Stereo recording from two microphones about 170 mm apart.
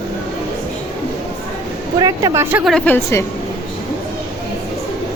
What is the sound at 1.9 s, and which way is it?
Speech, 20° right (ahead or behind).